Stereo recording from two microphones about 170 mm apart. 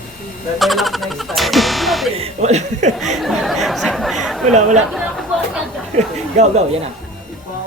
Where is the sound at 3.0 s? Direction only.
Centre (ahead or behind).